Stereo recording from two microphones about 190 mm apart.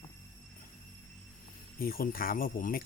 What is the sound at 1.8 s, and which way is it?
Speech, 50° left (ahead or behind).